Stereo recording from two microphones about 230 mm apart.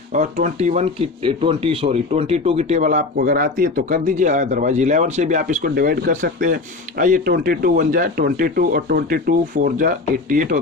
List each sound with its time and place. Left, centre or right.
0.1 s speech: right